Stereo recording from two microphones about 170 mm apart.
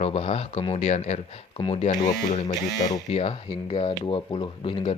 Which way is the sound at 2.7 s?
20° left (ahead or behind).